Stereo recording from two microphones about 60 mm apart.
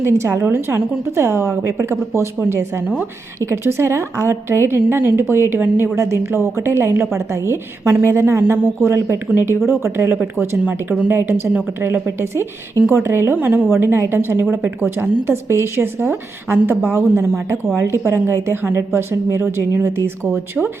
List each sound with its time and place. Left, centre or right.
0.0 s a woman's voice: right
0.3 s a woman's voice: right
6.0 s a woman's voice: right
17.7 s a woman's voice: right